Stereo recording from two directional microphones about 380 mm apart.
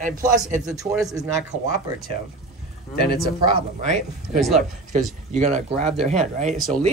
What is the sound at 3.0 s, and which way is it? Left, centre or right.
Speech, left.